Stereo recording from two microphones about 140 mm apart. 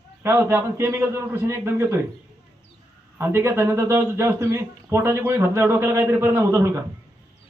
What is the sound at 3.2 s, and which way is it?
Speech, 20° right (ahead or behind).